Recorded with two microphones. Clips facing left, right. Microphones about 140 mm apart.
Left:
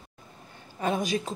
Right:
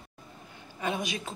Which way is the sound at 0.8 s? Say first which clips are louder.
Left 5 dB; 45° left (ahead or behind).